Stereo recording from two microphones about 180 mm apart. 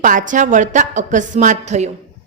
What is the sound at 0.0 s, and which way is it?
A woman's voice, 45° right (ahead or behind).